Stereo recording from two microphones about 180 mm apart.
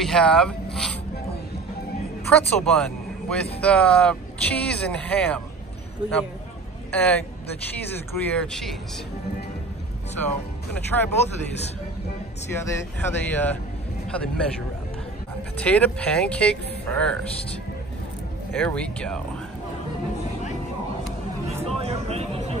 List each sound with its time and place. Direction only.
0.0 s speech: 5° left (ahead or behind)
2.3 s speech: 5° left (ahead or behind)
6.9 s speech: 10° left (ahead or behind)
10.1 s speech: 10° left (ahead or behind)
12.5 s speech: 15° left (ahead or behind)
15.5 s speech: 5° left (ahead or behind)
18.5 s speech: 5° left (ahead or behind)
21.8 s speech: 35° right (ahead or behind)